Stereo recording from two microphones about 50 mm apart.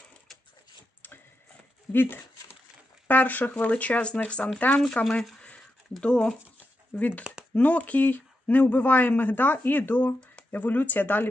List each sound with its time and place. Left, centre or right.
1.0 s printer: left
1.9 s speech: left
5.4 s a sound: left
6.0 s speech: centre
6.9 s speech: left